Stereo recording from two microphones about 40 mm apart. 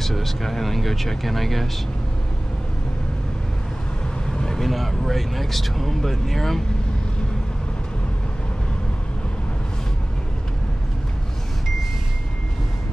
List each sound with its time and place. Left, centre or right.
0.0 s speech: centre
4.3 s speech: centre